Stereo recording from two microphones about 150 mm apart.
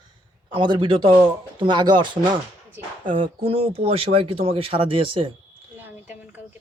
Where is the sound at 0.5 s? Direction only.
30° right (ahead or behind).